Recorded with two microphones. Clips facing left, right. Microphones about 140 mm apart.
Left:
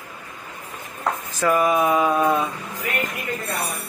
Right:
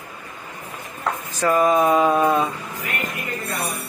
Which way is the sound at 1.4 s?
15° right (ahead or behind).